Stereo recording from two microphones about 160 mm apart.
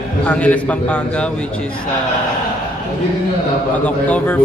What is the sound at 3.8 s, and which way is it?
Speech, 10° left (ahead or behind).